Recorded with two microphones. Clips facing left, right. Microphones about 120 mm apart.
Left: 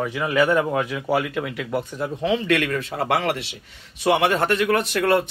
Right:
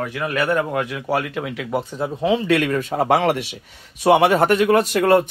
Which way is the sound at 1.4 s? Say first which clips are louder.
Even; 10° right (ahead or behind).